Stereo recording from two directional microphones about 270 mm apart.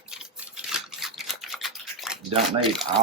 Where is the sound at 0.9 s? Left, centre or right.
Centre.